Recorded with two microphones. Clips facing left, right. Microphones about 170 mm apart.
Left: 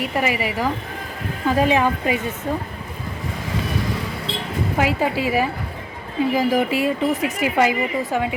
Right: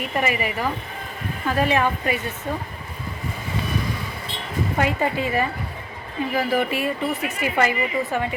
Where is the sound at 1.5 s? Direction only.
15° left (ahead or behind).